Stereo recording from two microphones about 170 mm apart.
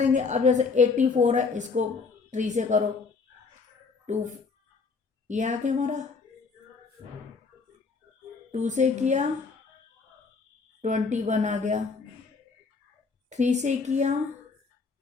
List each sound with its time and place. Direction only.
0.0 s a woman's voice: 45° right (ahead or behind)
4.0 s a woman's voice: 45° right (ahead or behind)
8.5 s a woman's voice: 45° right (ahead or behind)
10.8 s a woman's voice: 45° right (ahead or behind)
13.3 s a woman's voice: 45° right (ahead or behind)